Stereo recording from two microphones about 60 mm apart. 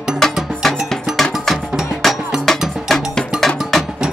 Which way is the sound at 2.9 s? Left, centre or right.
Centre.